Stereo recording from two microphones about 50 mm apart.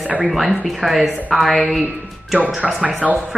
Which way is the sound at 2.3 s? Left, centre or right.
Right.